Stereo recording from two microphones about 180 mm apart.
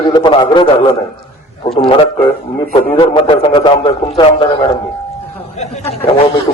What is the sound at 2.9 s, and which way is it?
A man's voice, 30° left (ahead or behind).